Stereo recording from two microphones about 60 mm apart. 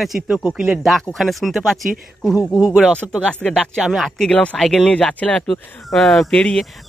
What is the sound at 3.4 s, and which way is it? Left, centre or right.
Speech, centre.